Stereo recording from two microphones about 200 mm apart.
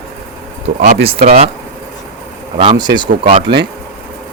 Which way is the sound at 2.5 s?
20° right (ahead or behind).